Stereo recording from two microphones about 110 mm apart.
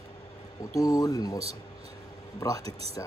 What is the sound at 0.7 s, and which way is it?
Speech, 30° left (ahead or behind).